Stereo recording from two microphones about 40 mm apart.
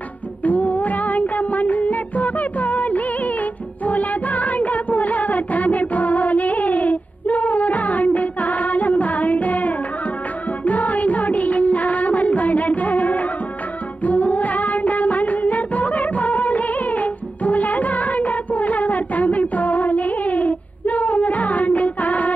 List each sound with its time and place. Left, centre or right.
0.4 s music: left